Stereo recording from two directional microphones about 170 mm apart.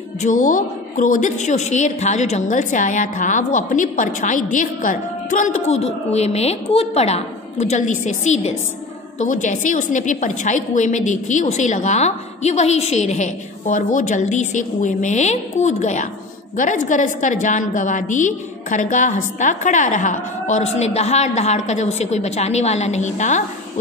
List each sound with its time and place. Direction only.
0.2 s a woman's voice: 50° left (ahead or behind)